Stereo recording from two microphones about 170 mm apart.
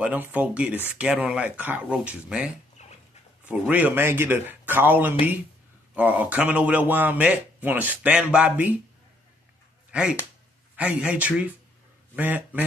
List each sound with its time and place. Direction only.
0.0 s a man's voice: 10° right (ahead or behind)
2.8 s dog: 45° left (ahead or behind)
3.4 s a man's voice: 10° right (ahead or behind)
9.8 s a sound: 5° right (ahead or behind)
10.8 s a man's voice: 10° right (ahead or behind)